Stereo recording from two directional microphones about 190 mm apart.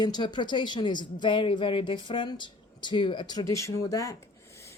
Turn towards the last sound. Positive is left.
turn(degrees=15)  # may be behind; listen again after turning